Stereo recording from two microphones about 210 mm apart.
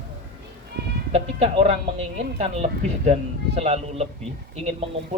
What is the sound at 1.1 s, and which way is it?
Speech, 30° right (ahead or behind).